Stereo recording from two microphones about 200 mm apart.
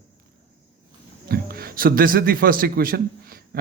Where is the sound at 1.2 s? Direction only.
50° right (ahead or behind).